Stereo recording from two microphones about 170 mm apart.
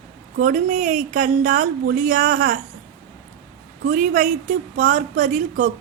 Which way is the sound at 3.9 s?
45° right (ahead or behind).